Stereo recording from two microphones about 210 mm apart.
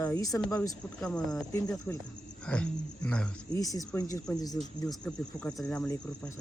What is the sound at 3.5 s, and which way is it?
Speech, 15° left (ahead or behind).